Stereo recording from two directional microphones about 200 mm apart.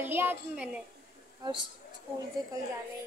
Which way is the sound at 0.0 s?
10° right (ahead or behind).